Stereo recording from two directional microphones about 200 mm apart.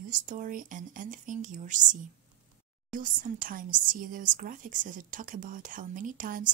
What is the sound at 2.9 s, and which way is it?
Speech, 40° right (ahead or behind).